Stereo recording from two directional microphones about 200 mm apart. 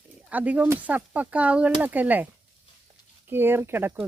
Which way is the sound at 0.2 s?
5° right (ahead or behind).